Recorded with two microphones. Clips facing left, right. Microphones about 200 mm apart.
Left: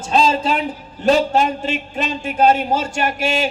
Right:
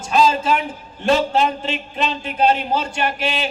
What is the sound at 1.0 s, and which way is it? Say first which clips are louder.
A man's voice: left 2 dB; 45° left (ahead or behind).